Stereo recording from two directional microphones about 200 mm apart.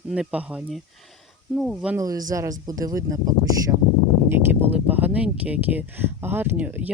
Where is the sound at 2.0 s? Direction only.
20° right (ahead or behind).